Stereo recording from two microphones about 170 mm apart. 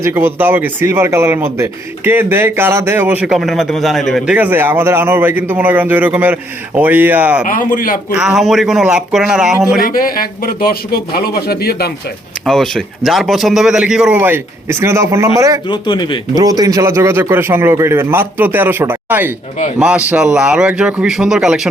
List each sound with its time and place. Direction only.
0.0 s speech: 15° right (ahead or behind)
4.4 s speech: 10° right (ahead or behind)
7.4 s a man's voice: 55° left (ahead or behind)
8.1 s speech: 5° right (ahead or behind)
9.8 s a man's voice: 60° left (ahead or behind)
12.5 s speech: centre (ahead or behind); by 15.6 s 20° right (ahead or behind)
15.7 s speech: 30° left (ahead or behind)
16.3 s speech: 20° right (ahead or behind); by 21.7 s 5° right (ahead or behind)